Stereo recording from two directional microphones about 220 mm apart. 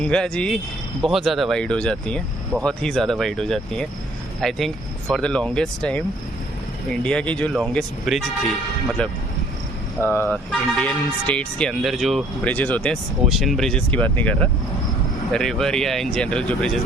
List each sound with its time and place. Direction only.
0.0 s speech: 5° left (ahead or behind)
10.2 s speech: 5° left (ahead or behind)